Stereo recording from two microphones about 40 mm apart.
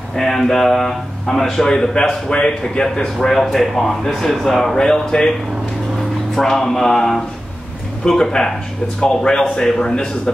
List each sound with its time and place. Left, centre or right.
0.1 s speech: centre
6.3 s speech: centre